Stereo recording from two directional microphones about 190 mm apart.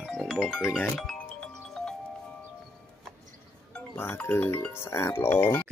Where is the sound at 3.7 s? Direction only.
10° left (ahead or behind).